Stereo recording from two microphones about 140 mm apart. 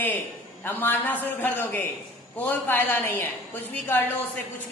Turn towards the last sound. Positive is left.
turn(degrees=15)  # may be behind; listen again after turning